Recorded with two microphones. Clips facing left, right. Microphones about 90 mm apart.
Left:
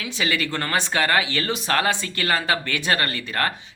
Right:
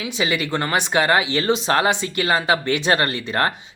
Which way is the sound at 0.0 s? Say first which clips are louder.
Right 2 dB; 20° right (ahead or behind).